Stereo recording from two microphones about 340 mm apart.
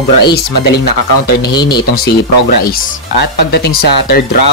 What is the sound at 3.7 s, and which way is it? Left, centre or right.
Speech, left.